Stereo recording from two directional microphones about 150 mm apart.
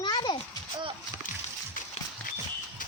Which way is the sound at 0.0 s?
30° left (ahead or behind).